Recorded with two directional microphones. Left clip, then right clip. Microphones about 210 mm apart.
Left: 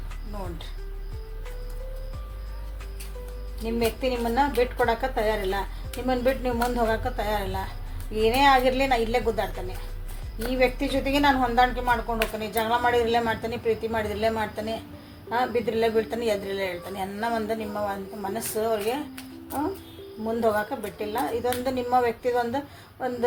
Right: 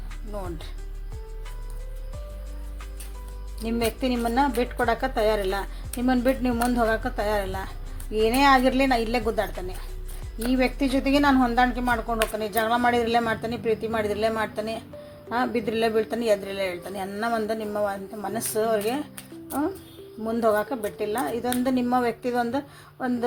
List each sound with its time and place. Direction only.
3.7 s a woman's voice: 50° right (ahead or behind)
10.6 s a woman's voice: 45° right (ahead or behind)
20.2 s a woman's voice: 45° right (ahead or behind)